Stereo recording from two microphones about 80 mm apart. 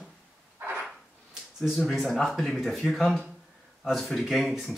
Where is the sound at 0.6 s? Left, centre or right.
Right.